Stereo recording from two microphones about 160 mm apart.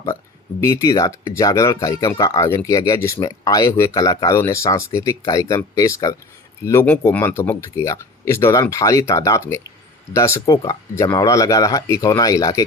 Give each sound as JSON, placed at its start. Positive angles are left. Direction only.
{"t": 0.6, "sound": "speech", "side_deg": 20}